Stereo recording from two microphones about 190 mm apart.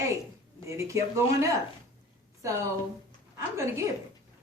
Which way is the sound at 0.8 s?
15° right (ahead or behind).